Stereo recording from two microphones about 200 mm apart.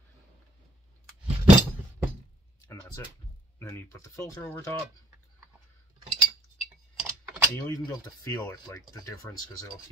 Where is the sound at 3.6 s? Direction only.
15° left (ahead or behind).